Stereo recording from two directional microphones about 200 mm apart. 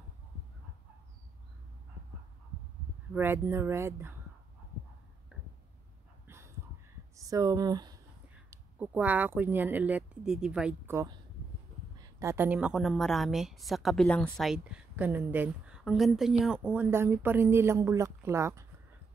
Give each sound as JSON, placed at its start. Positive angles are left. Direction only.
{"t": 3.1, "sound": "speech", "side_deg": -10}
{"t": 6.2, "sound": "a sound", "side_deg": -10}
{"t": 7.2, "sound": "speech", "side_deg": -15}
{"t": 8.5, "sound": "a woman's voice", "side_deg": -10}